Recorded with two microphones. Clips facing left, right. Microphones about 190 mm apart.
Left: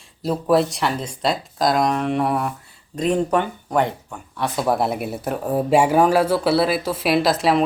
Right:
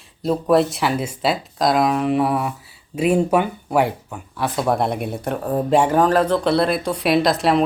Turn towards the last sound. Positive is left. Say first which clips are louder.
# right 1 dB
turn(degrees=0)  # may be behind; listen again after turning